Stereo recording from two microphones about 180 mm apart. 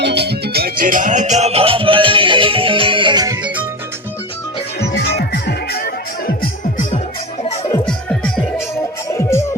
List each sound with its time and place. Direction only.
0.0 s music: 65° right (ahead or behind); by 3.3 s 25° right (ahead or behind)
3.4 s music: 10° right (ahead or behind)
4.9 s music: 70° left (ahead or behind)
7.4 s music: 35° left (ahead or behind)
7.9 s music: 5° left (ahead or behind)
9.1 s music: 15° left (ahead or behind)